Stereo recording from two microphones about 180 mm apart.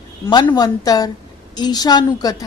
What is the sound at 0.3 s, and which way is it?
Speech, 25° left (ahead or behind).